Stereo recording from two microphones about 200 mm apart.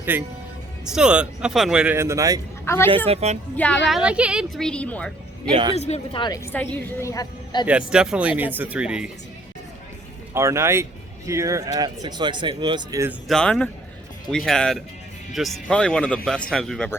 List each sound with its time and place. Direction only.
0.0 s a man's voice: 10° right (ahead or behind)
2.6 s a woman's voice: 10° left (ahead or behind)
3.1 s a woman's voice: 30° right (ahead or behind)
3.8 s a man's voice: 5° right (ahead or behind)
5.5 s speech: 25° right (ahead or behind)
5.7 s a woman's voice: 30° left (ahead or behind)
7.7 s a man's voice: 5° right (ahead or behind)
10.3 s speech: 15° right (ahead or behind)
13.2 s a man's voice: 5° left (ahead or behind)